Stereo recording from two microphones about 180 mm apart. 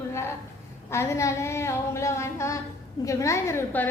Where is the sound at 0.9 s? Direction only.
15° left (ahead or behind).